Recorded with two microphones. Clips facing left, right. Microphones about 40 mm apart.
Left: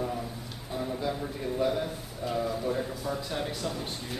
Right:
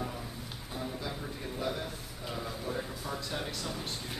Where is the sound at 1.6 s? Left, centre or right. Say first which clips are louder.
Left 7 dB; centre.